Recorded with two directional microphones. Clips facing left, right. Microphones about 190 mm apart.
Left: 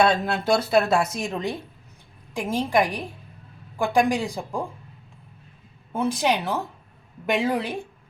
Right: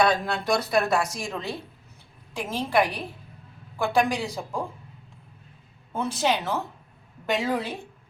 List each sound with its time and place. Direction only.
0.0 s speech: 25° left (ahead or behind)
5.9 s speech: 10° left (ahead or behind)